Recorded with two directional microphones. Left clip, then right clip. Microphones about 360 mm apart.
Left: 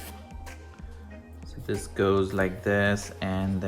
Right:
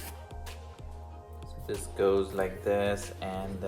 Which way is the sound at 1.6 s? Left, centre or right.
Left.